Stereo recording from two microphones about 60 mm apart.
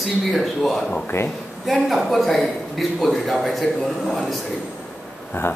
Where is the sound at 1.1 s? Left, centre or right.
Left.